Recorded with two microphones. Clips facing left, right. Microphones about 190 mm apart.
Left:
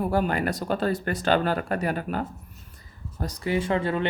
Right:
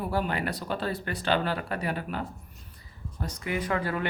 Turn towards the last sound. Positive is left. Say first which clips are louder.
# left 4 dB
turn(degrees=25)  # may be behind; listen again after turning